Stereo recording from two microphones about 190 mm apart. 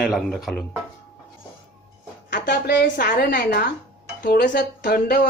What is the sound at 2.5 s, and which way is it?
A woman's voice, 60° left (ahead or behind).